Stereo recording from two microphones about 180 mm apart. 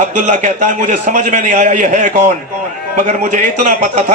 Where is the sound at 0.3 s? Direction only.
45° right (ahead or behind).